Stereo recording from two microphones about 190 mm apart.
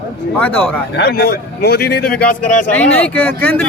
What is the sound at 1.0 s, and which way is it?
A man's voice, 60° left (ahead or behind).